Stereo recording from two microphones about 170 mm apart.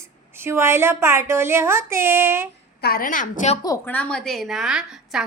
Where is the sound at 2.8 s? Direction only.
60° left (ahead or behind).